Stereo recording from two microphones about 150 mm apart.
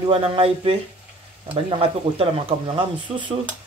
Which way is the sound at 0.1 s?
40° right (ahead or behind).